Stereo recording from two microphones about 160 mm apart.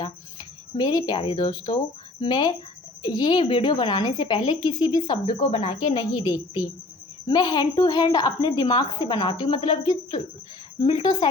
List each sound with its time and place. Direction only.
0.0 s a woman's voice: 25° left (ahead or behind)